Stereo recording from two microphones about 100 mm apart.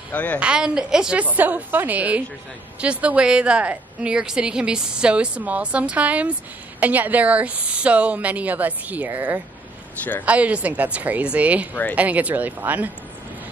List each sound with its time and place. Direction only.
0.1 s a woman's voice: 15° left (ahead or behind)
0.4 s a woman's voice: 10° right (ahead or behind)